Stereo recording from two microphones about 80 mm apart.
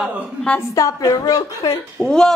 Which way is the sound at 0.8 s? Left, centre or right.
Left.